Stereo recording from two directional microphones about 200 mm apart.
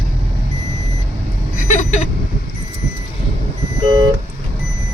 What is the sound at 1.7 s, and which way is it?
Vehicle, 35° left (ahead or behind).